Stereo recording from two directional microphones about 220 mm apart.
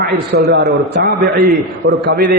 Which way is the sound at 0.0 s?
45° right (ahead or behind).